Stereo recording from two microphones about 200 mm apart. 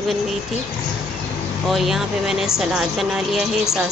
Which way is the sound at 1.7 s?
Centre (ahead or behind).